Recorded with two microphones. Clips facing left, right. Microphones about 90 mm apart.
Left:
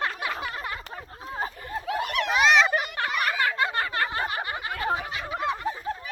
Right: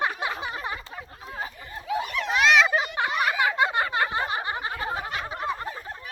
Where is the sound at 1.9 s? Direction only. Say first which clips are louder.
Even; 65° left (ahead or behind).